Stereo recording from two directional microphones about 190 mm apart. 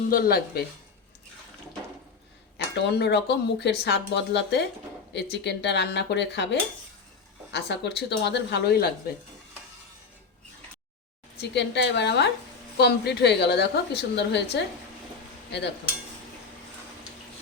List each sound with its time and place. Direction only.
0.1 s speech: 50° left (ahead or behind)
2.7 s speech: 60° left (ahead or behind)
11.3 s speech: 65° left (ahead or behind)